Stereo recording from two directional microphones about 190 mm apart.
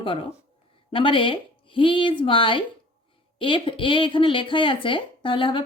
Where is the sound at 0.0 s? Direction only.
30° left (ahead or behind).